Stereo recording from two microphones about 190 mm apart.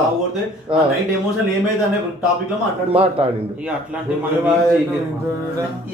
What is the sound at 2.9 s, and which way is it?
Speech, 30° right (ahead or behind).